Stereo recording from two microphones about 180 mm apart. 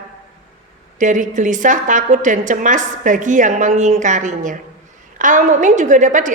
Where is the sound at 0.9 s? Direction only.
45° right (ahead or behind).